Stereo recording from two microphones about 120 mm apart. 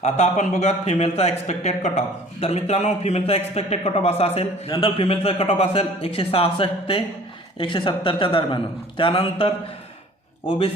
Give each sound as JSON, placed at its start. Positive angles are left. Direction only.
{"t": 0.0, "sound": "a man's voice", "side_deg": 75}